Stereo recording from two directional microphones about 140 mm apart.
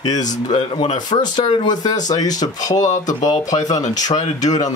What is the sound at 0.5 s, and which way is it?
Speech, 40° left (ahead or behind).